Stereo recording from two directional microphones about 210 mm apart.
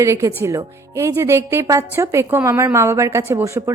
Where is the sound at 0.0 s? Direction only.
15° right (ahead or behind).